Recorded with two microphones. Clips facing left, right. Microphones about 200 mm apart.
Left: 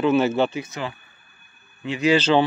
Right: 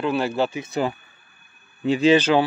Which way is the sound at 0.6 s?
30° right (ahead or behind).